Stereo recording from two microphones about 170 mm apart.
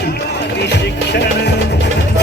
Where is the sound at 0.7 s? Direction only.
80° left.